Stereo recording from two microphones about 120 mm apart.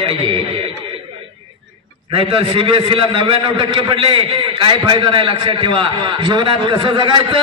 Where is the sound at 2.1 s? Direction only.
45° right (ahead or behind).